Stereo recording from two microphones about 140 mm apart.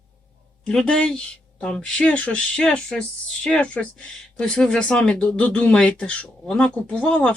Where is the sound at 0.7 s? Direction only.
5° left (ahead or behind).